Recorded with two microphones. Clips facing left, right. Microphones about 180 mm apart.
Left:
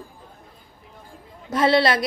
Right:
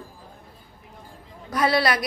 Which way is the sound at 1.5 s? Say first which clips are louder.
Left 3 dB; 25° left (ahead or behind).